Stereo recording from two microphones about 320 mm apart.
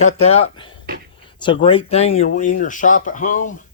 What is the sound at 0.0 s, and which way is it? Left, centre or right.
Speech, left.